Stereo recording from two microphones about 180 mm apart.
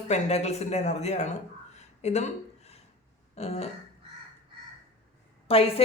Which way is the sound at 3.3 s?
35° left (ahead or behind).